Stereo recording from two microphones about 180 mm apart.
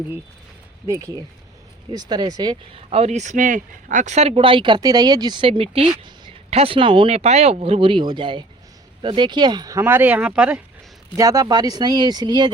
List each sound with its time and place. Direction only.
0.9 s speech: 20° right (ahead or behind)
11.2 s speech: 20° right (ahead or behind)